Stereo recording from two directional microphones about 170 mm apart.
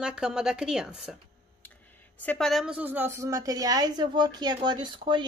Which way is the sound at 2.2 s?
5° left (ahead or behind).